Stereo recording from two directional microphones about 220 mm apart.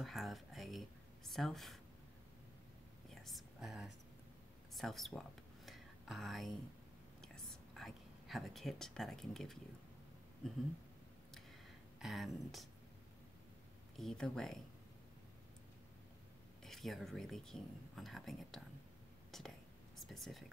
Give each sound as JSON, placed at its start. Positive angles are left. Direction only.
{"t": 0.0, "sound": "speech", "side_deg": 0}
{"t": 3.2, "sound": "whispering", "side_deg": 0}
{"t": 4.7, "sound": "speech", "side_deg": 0}
{"t": 5.7, "sound": "a sound", "side_deg": 0}
{"t": 7.2, "sound": "whispering", "side_deg": 0}
{"t": 12.0, "sound": "speech", "side_deg": 0}
{"t": 13.9, "sound": "speech", "side_deg": 0}
{"t": 16.6, "sound": "speech", "side_deg": 0}
{"t": 19.3, "sound": "whispering", "side_deg": 0}
{"t": 20.0, "sound": "speech", "side_deg": 0}